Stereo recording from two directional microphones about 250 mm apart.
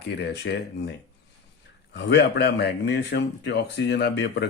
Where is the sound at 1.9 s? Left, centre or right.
Left.